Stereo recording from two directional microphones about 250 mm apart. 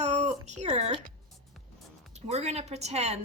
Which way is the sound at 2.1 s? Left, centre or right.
Right.